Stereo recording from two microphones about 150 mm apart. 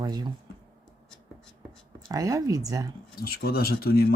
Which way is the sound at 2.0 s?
20° right (ahead or behind).